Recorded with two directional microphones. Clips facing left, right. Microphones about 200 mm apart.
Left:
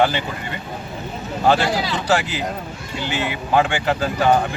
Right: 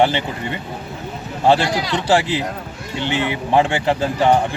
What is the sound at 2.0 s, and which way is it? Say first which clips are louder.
Speech: right 4 dB; 30° right (ahead or behind).